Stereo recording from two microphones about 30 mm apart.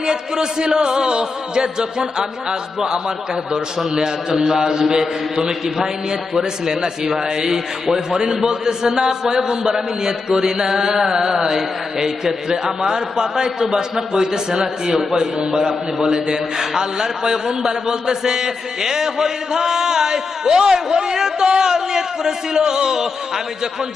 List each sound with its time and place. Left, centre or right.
0.0 s a man's voice: right